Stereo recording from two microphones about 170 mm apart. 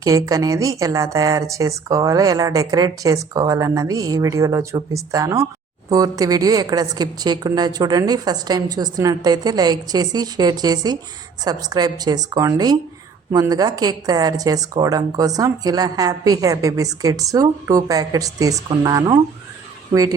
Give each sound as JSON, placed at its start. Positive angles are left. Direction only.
{"t": 0.0, "sound": "a woman's voice", "side_deg": -20}